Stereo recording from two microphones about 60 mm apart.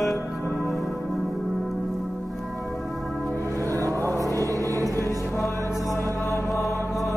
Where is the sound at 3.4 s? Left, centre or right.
Right.